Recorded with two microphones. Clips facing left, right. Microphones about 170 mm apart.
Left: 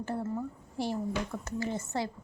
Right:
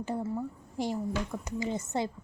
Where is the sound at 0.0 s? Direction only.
10° right (ahead or behind).